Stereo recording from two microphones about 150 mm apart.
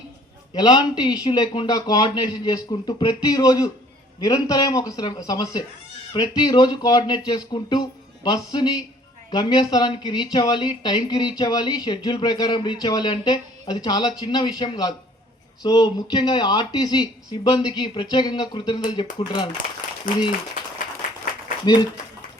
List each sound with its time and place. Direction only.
0.5 s speech: 30° left (ahead or behind)
21.6 s speech: 25° left (ahead or behind)